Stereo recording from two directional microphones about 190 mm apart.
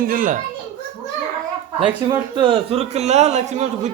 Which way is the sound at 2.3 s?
25° right (ahead or behind).